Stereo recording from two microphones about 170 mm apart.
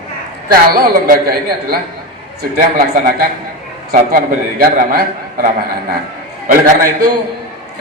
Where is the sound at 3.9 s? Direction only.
50° right (ahead or behind).